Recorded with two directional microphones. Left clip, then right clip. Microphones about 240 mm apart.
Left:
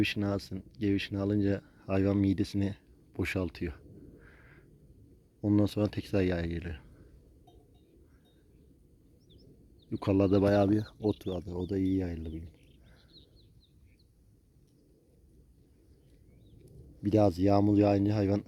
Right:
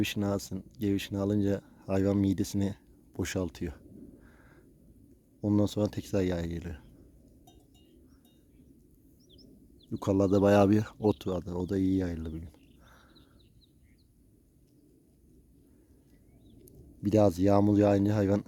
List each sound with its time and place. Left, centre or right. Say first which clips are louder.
0.0 s speech: even; centre
9.9 s speech: even; centre
17.0 s a man's voice: right 1 dB; right